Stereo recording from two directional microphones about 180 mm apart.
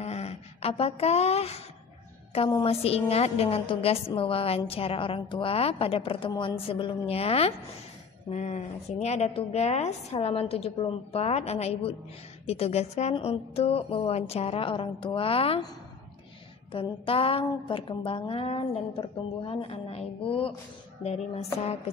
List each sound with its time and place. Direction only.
0.0 s a sound: 35° left (ahead or behind)
2.6 s a woman's voice: 35° left (ahead or behind)
16.7 s a woman's voice: 30° left (ahead or behind)